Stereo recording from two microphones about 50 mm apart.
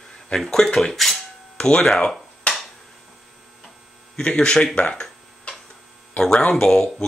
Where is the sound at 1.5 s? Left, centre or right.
Centre.